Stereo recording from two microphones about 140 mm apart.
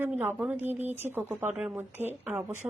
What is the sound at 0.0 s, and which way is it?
A woman's voice, 15° right (ahead or behind).